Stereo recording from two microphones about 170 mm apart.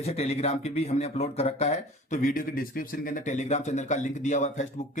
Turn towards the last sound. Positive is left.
turn(degrees=45)  # may be behind; listen again after turning